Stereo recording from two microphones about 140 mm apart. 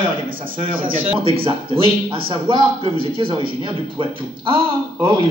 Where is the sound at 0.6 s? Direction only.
40° right (ahead or behind).